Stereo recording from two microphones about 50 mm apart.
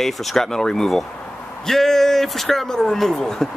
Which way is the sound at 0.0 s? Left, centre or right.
Centre.